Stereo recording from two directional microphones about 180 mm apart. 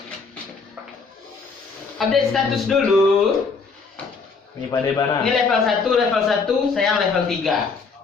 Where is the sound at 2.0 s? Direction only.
Centre (ahead or behind).